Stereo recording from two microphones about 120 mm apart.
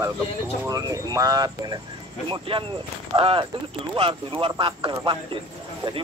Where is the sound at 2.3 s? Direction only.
45° right (ahead or behind).